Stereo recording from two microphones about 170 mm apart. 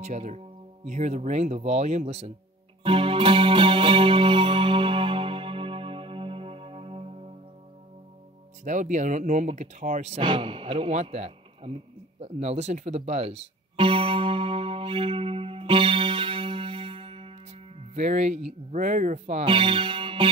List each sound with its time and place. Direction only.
0.0 s speech: 40° right (ahead or behind)
2.8 s music: 30° right (ahead or behind)
8.6 s speech: 45° right (ahead or behind)
10.2 s speech: 30° right (ahead or behind)
13.7 s music: 30° right (ahead or behind)
17.9 s speech: 45° right (ahead or behind)
19.5 s speech: 30° right (ahead or behind)